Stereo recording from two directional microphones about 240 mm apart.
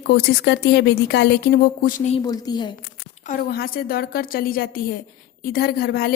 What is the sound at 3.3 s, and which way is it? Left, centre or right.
A woman's voice, left.